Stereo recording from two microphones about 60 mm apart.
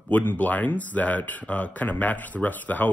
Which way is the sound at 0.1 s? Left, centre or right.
Left.